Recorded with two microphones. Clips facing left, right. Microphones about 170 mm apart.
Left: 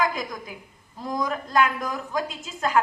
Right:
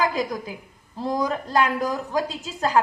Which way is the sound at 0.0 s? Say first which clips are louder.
Right 3 dB; 35° right (ahead or behind).